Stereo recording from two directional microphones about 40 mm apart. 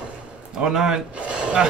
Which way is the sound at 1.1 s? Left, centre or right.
Right.